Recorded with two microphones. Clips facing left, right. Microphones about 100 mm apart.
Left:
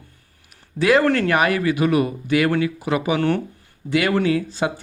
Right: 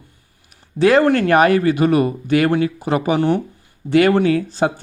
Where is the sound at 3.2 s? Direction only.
15° right (ahead or behind).